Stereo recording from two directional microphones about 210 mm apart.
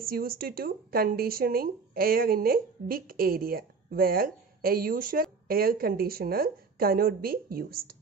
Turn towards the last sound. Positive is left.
turn(degrees=-45)  # may be behind; listen again after turning